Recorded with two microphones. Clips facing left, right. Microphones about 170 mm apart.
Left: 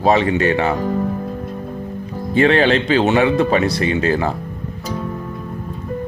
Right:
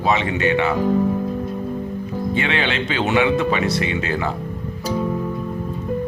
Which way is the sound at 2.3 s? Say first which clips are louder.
Left 10 dB; 40° left (ahead or behind).